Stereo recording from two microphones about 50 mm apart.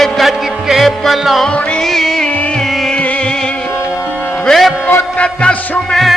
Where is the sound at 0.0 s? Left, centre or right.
Centre.